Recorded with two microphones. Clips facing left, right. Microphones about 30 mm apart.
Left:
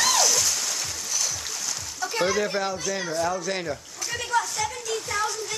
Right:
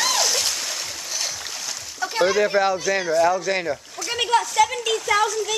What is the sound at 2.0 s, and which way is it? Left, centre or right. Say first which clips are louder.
Speech: right 5 dB; right.